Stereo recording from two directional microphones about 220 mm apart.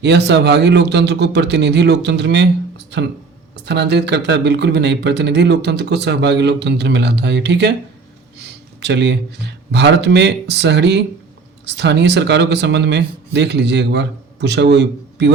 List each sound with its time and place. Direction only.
0.0 s speech: 50° right (ahead or behind)
8.4 s a sound: 50° right (ahead or behind)
9.7 s speech: 50° right (ahead or behind)